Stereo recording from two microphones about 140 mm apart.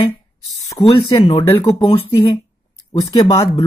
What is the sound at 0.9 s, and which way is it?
Speech, 35° left (ahead or behind).